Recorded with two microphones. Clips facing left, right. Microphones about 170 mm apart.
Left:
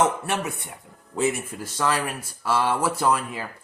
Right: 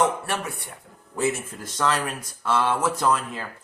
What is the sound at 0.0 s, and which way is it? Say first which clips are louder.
Speech: left 1 dB; 20° left (ahead or behind).